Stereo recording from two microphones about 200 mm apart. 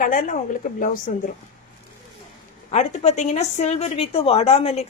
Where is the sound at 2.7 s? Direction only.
35° left (ahead or behind).